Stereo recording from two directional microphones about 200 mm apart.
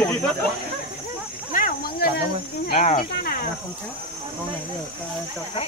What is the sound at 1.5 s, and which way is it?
Snake, 45° left (ahead or behind).